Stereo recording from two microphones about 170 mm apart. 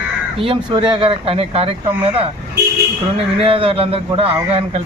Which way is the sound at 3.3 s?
35° right (ahead or behind).